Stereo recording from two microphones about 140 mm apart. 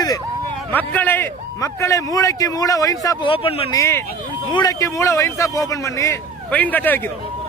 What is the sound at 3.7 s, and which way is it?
A man's voice, 20° left (ahead or behind).